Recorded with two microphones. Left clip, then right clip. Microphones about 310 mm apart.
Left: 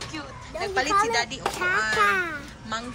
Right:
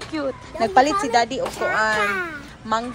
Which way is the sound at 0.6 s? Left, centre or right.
Centre.